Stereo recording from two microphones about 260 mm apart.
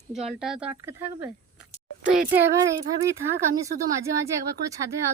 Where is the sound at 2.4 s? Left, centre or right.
Centre.